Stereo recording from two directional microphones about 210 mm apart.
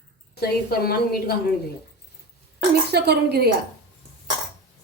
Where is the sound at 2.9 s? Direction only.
50° right (ahead or behind).